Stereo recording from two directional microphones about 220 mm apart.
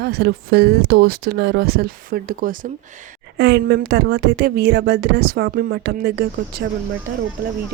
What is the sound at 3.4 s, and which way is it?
A woman's voice, 50° right (ahead or behind).